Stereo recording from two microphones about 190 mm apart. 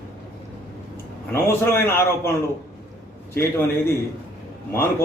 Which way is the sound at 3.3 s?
10° left (ahead or behind).